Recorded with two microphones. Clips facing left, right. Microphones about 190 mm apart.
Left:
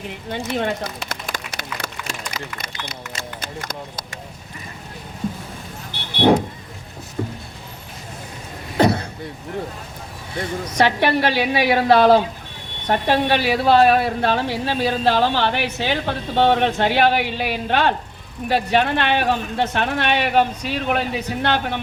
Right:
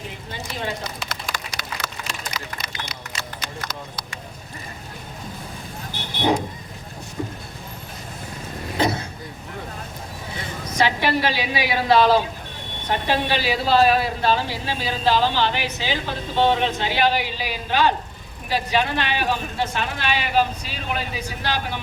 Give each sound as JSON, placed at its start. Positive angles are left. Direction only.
{"t": 0.3, "sound": "a sound", "side_deg": 60}
{"t": 2.6, "sound": "speech", "side_deg": 55}
{"t": 7.2, "sound": "vehicle", "side_deg": 50}
{"t": 10.3, "sound": "a woman's voice", "side_deg": 60}